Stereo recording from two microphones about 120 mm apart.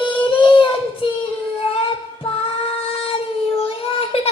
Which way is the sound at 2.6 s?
50° left (ahead or behind).